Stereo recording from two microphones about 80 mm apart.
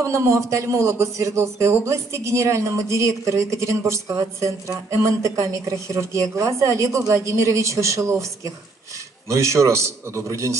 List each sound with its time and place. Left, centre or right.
0.0 s a man's voice: right